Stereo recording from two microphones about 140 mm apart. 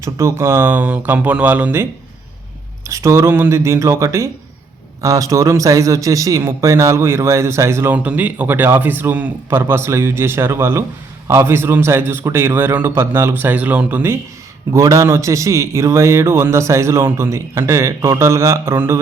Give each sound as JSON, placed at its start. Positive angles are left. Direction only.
{"t": 0.0, "sound": "a man's voice", "side_deg": -20}
{"t": 2.9, "sound": "a man's voice", "side_deg": -20}